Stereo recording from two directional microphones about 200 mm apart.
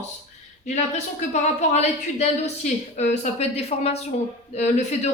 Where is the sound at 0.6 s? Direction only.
35° left (ahead or behind).